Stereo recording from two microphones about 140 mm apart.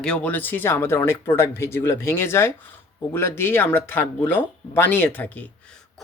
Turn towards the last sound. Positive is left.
turn(degrees=10)  # may be behind; listen again after turning